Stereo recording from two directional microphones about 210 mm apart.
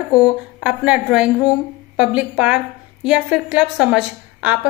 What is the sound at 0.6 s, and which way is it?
A woman's voice, 5° right (ahead or behind).